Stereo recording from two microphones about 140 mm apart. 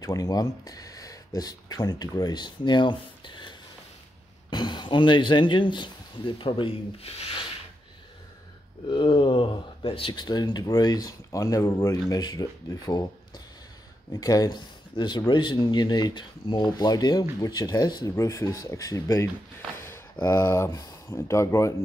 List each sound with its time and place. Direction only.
0.0 s speech: 25° left (ahead or behind); by 7.4 s 45° left (ahead or behind)
8.9 s speech: 35° left (ahead or behind)
14.2 s speech: 25° left (ahead or behind)
20.2 s speech: 20° left (ahead or behind)